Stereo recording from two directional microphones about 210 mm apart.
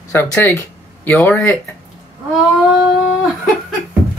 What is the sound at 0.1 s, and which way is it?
Speech, 10° left (ahead or behind).